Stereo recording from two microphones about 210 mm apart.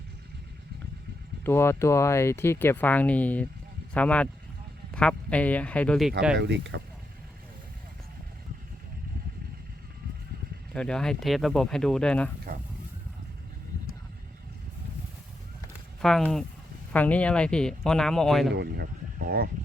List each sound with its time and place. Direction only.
1.5 s speech: 10° left (ahead or behind)
6.3 s speech: 55° right (ahead or behind)
10.8 s speech: 5° left (ahead or behind)
16.0 s speech: centre (ahead or behind)
18.5 s speech: 50° right (ahead or behind)